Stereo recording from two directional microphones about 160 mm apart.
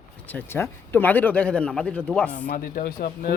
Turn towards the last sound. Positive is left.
turn(degrees=65)  # may be behind; listen again after turning